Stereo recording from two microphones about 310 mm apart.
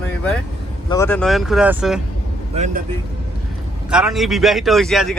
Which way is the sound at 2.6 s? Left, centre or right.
Right.